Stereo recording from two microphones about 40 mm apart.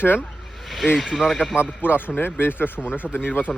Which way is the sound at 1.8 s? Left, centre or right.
Left.